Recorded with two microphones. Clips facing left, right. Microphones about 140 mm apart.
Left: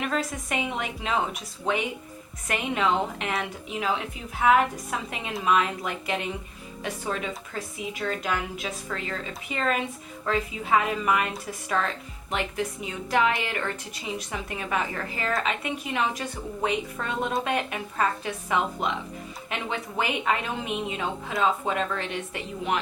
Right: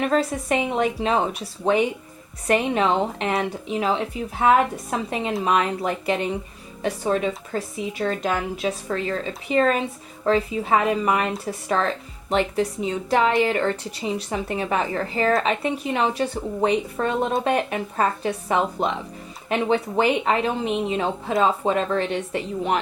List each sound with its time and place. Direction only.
0.1 s a woman's voice: 30° right (ahead or behind)